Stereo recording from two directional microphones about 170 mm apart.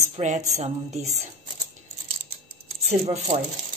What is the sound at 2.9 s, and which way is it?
Speech, 40° right (ahead or behind).